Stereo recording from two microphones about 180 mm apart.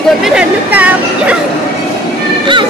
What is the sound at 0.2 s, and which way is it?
Speech, 5° right (ahead or behind).